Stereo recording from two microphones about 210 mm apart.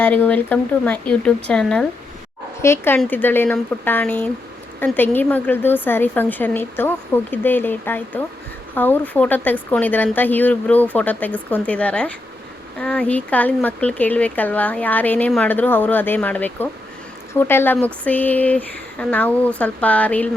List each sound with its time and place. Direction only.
0.0 s speech: 10° left (ahead or behind)